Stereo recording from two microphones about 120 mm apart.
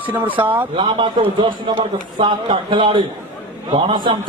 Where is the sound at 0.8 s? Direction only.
40° right (ahead or behind).